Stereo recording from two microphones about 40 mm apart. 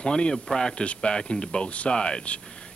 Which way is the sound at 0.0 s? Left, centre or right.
Left.